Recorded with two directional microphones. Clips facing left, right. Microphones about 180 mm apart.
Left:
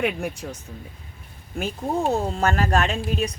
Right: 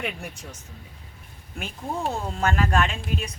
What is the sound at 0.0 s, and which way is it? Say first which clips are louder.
Speech: left 8 dB; 60° left (ahead or behind).